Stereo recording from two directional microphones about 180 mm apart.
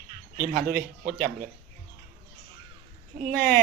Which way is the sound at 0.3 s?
50° right (ahead or behind).